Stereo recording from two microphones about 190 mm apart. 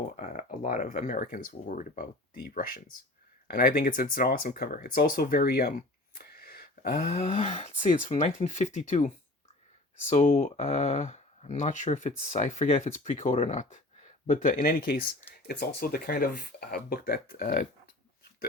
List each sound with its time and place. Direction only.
0.2 s speech: 40° left (ahead or behind)